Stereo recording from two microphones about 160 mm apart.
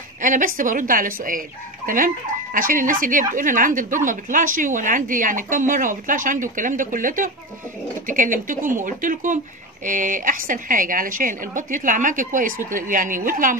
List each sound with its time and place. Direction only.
0.2 s speech: 55° right (ahead or behind)